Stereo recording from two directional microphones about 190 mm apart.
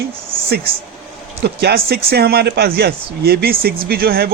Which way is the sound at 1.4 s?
60° right (ahead or behind).